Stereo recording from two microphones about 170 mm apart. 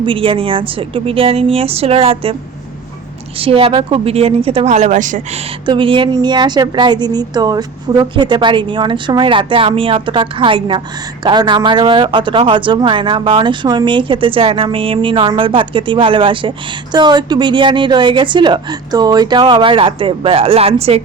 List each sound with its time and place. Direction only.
0.0 s a woman's voice: 30° right (ahead or behind)
3.3 s a woman's voice: 35° right (ahead or behind); by 5.4 s 50° right (ahead or behind)
5.6 s a woman's voice: 30° right (ahead or behind)